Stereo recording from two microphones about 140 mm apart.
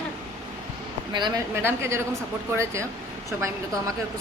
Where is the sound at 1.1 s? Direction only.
30° right (ahead or behind).